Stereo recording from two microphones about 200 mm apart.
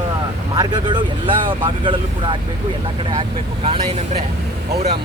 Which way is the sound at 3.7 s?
30° right (ahead or behind).